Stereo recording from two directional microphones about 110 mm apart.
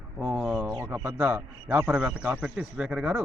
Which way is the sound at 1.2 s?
20° right (ahead or behind).